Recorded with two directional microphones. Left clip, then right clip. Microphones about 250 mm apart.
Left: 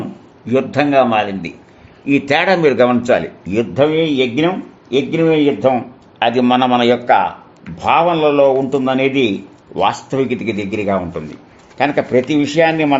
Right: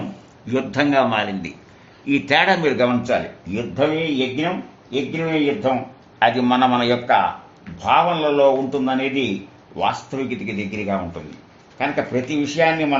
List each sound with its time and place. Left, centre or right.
0.4 s a man's voice: left